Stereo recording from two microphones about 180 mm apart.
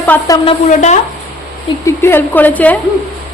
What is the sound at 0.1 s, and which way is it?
Speech, 10° left (ahead or behind).